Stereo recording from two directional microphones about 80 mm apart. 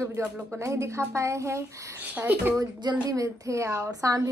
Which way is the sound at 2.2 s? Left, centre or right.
Right.